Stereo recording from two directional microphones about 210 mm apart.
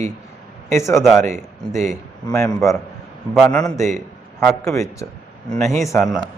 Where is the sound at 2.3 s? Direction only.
15° left (ahead or behind).